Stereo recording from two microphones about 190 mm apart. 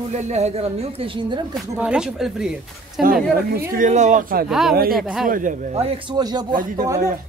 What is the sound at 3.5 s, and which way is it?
Speech, 45° right (ahead or behind).